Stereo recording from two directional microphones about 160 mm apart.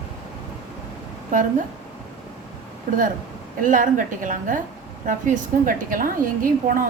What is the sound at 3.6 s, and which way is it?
A woman's voice, 55° right (ahead or behind).